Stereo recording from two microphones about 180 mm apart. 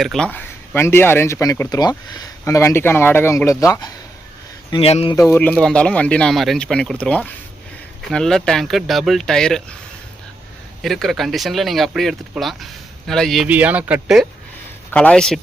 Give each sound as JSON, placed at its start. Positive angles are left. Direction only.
{"t": 0.0, "sound": "speech", "side_deg": 5}
{"t": 4.7, "sound": "speech", "side_deg": 35}
{"t": 5.1, "sound": "speech", "side_deg": 15}
{"t": 10.8, "sound": "speech", "side_deg": 0}
{"t": 14.8, "sound": "speech", "side_deg": 10}